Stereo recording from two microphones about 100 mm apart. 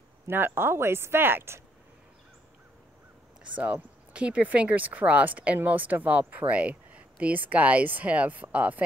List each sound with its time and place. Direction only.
0.3 s speech: 20° right (ahead or behind)
3.5 s speech: 15° right (ahead or behind)